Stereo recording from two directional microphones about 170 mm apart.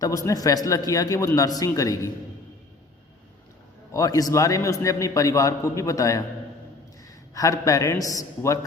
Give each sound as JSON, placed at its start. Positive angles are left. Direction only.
{"t": 0.0, "sound": "a man's voice", "side_deg": 20}
{"t": 3.9, "sound": "a man's voice", "side_deg": 20}
{"t": 7.3, "sound": "a man's voice", "side_deg": 20}